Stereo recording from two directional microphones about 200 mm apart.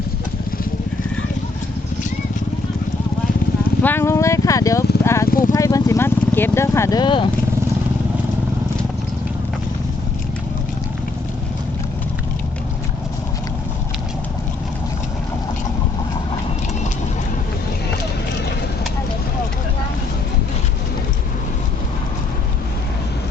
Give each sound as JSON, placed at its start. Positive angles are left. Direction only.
{"t": 3.8, "sound": "speech", "side_deg": 10}
{"t": 5.3, "sound": "vehicle", "side_deg": 45}
{"t": 5.5, "sound": "vehicle", "side_deg": 15}